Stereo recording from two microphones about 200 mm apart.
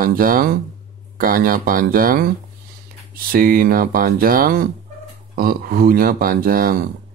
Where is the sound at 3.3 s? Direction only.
45° right (ahead or behind).